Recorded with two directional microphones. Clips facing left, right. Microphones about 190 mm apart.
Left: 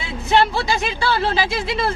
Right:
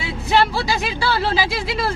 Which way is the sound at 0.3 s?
Centre (ahead or behind).